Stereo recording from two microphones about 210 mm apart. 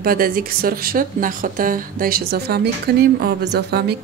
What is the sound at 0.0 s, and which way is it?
Speech, 45° right (ahead or behind).